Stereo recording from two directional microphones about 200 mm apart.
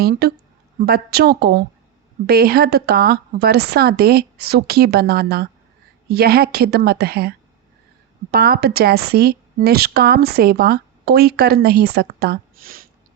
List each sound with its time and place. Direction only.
0.0 s a woman's voice: 50° right (ahead or behind)